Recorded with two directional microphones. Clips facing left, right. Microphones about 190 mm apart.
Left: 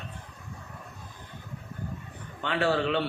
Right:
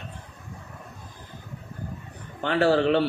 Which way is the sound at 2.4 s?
40° right (ahead or behind).